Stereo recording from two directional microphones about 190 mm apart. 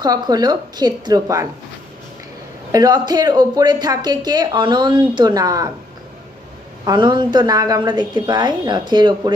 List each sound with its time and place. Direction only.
0.0 s a woman's voice: 20° right (ahead or behind)
2.7 s a woman's voice: 20° right (ahead or behind)
6.8 s a woman's voice: 20° right (ahead or behind)